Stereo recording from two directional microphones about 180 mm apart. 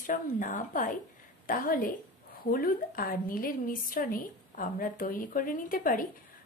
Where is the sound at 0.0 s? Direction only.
45° left (ahead or behind).